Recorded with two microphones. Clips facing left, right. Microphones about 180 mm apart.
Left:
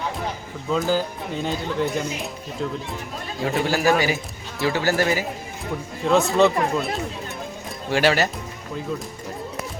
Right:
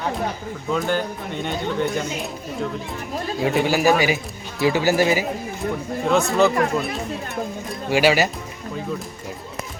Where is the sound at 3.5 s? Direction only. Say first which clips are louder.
Right 1 dB; 10° right (ahead or behind).